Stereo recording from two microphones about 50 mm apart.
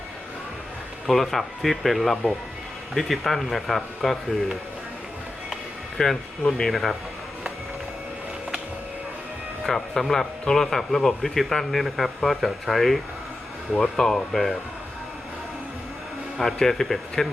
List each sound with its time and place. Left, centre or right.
1.0 s speech: centre
6.0 s speech: centre
9.6 s speech: centre
16.4 s speech: centre